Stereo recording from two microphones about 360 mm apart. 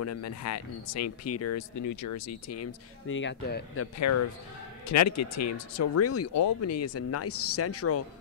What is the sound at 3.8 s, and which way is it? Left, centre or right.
Speech, left.